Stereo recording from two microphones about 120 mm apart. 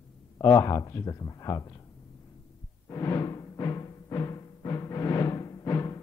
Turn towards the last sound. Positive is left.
turn(degrees=25)  # may be behind; listen again after turning